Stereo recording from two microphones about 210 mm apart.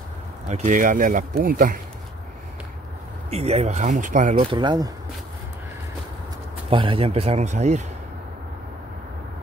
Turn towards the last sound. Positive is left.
turn(degrees=-35)  # may be behind; listen again after turning